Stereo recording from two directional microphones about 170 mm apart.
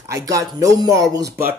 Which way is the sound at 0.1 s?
20° right (ahead or behind).